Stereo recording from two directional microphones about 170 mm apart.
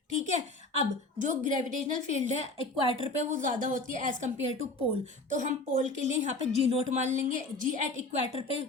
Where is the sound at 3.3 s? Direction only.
50° right (ahead or behind).